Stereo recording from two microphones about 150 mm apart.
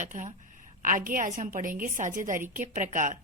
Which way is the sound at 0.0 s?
55° right (ahead or behind).